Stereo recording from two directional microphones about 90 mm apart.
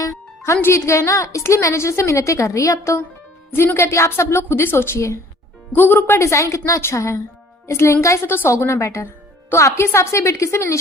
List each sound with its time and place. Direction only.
0.0 s a woman's voice: 35° left (ahead or behind)
5.7 s a woman's voice: 20° left (ahead or behind)
6.2 s speech: 35° left (ahead or behind)